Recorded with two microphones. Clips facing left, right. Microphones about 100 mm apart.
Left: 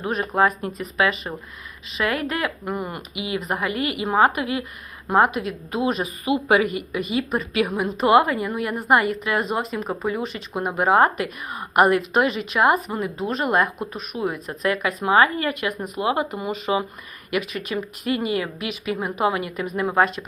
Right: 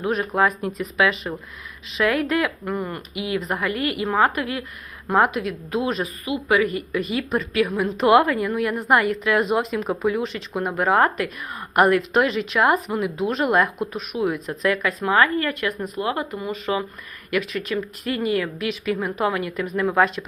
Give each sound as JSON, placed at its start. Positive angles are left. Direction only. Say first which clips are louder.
{"t": 0.0, "sound": "a woman's voice", "louder": "even", "side_deg": 0}
{"t": 6.2, "sound": "a woman's voice", "louder": "left 2 dB", "side_deg": 25}
{"t": 6.9, "sound": "a woman's voice", "louder": "right 1 dB", "side_deg": 5}
{"t": 7.5, "sound": "a woman's voice", "louder": "right 1 dB", "side_deg": 20}
{"t": 7.8, "sound": "a woman's voice", "louder": "right 1 dB", "side_deg": 5}